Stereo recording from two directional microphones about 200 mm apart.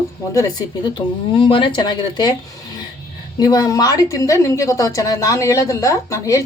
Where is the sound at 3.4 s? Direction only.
20° left (ahead or behind).